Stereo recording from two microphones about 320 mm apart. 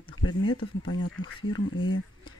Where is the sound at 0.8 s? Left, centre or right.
Left.